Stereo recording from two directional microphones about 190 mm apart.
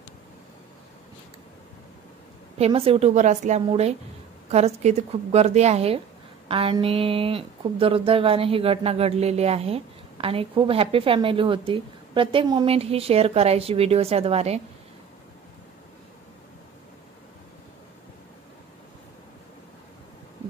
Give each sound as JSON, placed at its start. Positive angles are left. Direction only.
{"t": 2.6, "sound": "a woman's voice", "side_deg": -30}